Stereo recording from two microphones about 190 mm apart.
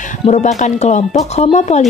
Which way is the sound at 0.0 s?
40° left (ahead or behind).